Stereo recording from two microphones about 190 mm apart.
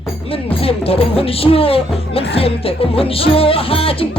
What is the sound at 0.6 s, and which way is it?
Speech, 30° left (ahead or behind).